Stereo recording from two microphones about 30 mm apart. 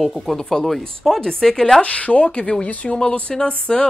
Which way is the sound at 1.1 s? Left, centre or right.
Centre.